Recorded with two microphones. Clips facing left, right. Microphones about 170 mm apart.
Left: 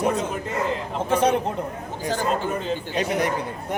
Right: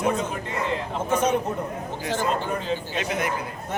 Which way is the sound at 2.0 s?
40° left (ahead or behind).